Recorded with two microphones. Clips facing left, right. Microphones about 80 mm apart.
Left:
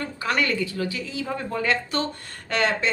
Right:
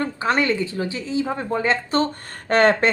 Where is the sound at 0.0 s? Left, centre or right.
Right.